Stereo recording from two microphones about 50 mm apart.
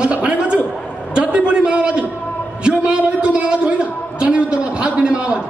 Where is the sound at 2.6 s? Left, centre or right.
Centre.